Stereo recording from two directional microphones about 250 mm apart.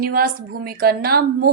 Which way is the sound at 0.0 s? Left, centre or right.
Right.